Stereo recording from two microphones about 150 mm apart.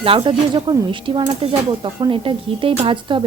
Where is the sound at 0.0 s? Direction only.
35° right (ahead or behind).